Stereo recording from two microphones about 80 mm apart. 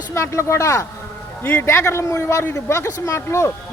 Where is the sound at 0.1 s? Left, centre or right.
Left.